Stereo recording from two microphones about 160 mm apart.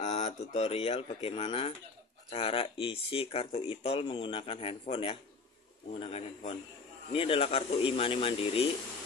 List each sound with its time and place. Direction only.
0.0 s speech: 45° left (ahead or behind)